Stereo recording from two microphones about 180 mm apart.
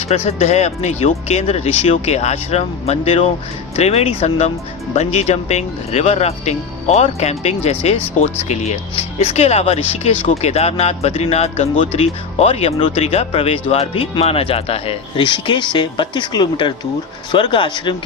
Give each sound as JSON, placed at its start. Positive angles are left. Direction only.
{"t": 0.1, "sound": "speech", "side_deg": 35}